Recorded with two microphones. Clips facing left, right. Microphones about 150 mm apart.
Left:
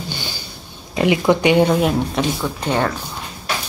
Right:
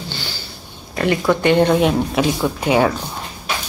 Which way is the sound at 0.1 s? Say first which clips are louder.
Left 1 dB; 20° left (ahead or behind).